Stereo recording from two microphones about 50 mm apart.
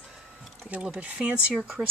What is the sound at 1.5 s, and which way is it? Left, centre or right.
Speech, centre.